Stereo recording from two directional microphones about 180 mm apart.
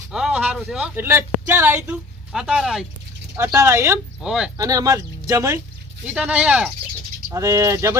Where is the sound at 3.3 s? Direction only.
15° right (ahead or behind).